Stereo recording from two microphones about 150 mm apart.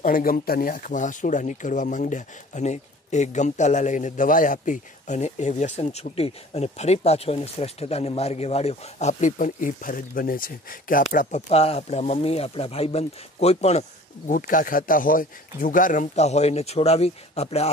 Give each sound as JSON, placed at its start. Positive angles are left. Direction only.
{"t": 0.0, "sound": "speech", "side_deg": 70}
{"t": 11.1, "sound": "speech", "side_deg": 50}
{"t": 14.3, "sound": "speech", "side_deg": 65}